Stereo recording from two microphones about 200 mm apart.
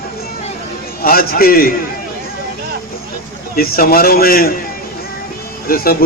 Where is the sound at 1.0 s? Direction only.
45° left (ahead or behind).